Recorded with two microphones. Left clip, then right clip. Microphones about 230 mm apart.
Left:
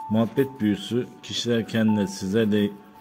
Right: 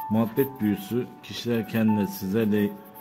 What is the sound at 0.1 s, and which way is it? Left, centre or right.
A man's voice, centre.